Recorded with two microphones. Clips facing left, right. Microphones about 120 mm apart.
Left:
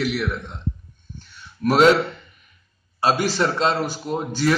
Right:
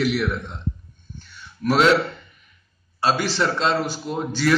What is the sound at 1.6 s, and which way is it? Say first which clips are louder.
Speech: left 3 dB; 45° left (ahead or behind).